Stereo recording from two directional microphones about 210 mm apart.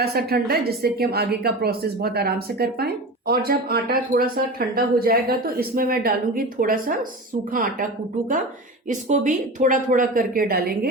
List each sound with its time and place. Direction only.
0.0 s a woman's voice: 45° right (ahead or behind)
8.9 s speech: 35° right (ahead or behind)